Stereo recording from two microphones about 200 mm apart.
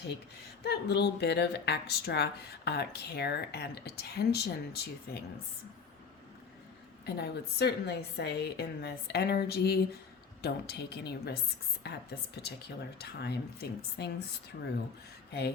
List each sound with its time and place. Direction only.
0.6 s speech: 55° left (ahead or behind)
7.0 s a woman's voice: 55° left (ahead or behind)
15.3 s speech: 55° left (ahead or behind)